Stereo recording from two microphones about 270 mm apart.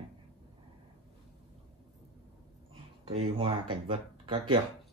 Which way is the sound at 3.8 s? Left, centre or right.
Centre.